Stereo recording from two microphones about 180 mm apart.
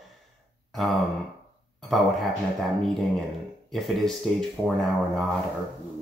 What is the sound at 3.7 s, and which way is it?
A man's voice, centre (ahead or behind).